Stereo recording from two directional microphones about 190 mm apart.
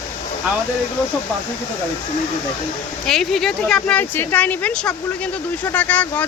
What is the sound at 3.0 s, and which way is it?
Speech, centre (ahead or behind).